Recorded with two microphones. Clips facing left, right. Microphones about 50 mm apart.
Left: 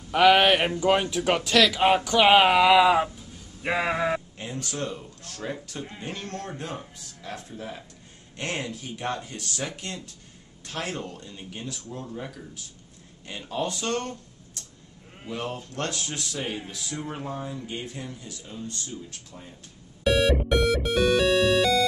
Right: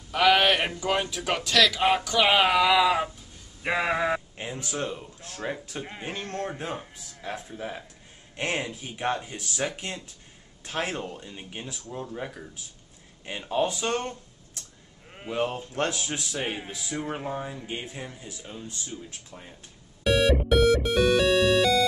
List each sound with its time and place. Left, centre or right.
0.1 s speech: centre
3.6 s a sound: centre
4.4 s speech: centre
20.0 s music: centre